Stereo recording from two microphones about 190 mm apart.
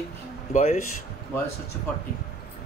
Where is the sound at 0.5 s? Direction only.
35° left (ahead or behind).